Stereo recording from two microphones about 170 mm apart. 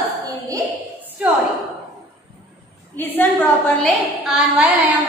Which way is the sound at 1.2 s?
10° right (ahead or behind).